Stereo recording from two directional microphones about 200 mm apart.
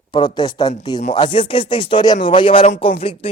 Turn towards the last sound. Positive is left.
turn(degrees=30)  # may be behind; listen again after turning